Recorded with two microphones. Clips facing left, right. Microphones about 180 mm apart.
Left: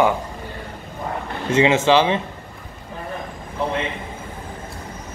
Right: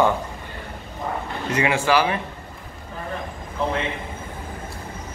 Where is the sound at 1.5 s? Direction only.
20° left (ahead or behind).